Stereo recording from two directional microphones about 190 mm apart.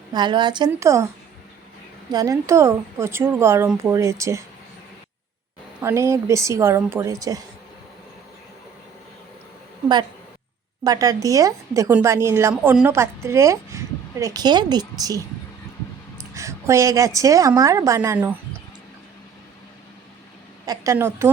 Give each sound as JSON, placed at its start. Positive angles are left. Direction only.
{"t": 0.1, "sound": "a woman's voice", "side_deg": -25}
{"t": 2.1, "sound": "a woman's voice", "side_deg": -15}
{"t": 5.8, "sound": "a woman's voice", "side_deg": -15}
{"t": 10.8, "sound": "a woman's voice", "side_deg": -20}
{"t": 16.3, "sound": "a woman's voice", "side_deg": -15}
{"t": 20.7, "sound": "a woman's voice", "side_deg": -15}